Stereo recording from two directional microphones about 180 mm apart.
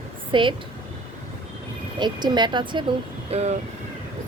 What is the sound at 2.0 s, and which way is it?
Speech, 25° right (ahead or behind).